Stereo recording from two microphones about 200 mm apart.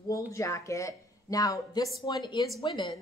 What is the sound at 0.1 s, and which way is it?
A woman's voice, 15° left (ahead or behind).